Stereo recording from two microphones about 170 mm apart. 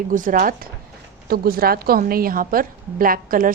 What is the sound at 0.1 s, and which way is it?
A woman's voice, 50° right (ahead or behind).